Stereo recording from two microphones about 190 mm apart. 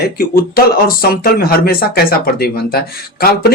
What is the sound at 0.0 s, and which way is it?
Speech, 55° left (ahead or behind).